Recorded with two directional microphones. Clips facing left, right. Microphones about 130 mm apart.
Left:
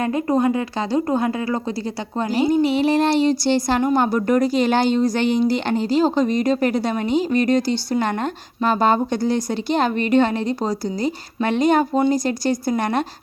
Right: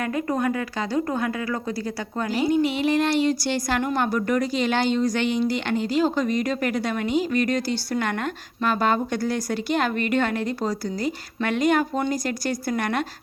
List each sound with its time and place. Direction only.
0.0 s speech: 25° left (ahead or behind)